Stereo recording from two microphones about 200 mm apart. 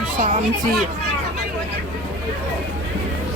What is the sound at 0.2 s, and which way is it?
Speech, 40° right (ahead or behind).